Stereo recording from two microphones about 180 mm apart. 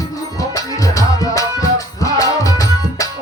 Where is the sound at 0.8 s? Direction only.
20° left (ahead or behind).